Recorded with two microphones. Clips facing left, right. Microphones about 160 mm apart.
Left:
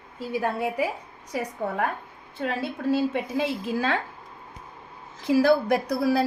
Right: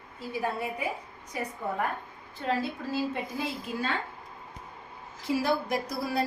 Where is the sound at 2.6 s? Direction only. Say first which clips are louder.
Left 6 dB; 80° left.